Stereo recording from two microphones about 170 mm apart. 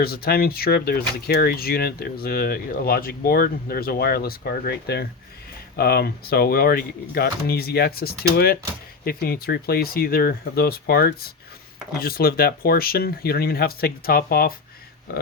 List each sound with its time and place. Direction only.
0.0 s speech: 65° left (ahead or behind)